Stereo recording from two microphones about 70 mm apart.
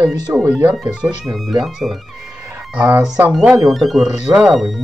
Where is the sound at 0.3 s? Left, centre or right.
Right.